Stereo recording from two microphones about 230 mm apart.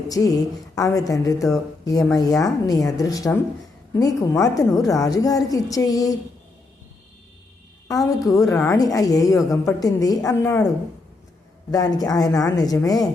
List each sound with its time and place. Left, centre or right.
0.1 s a woman's voice: centre
7.9 s a woman's voice: centre
11.7 s a woman's voice: centre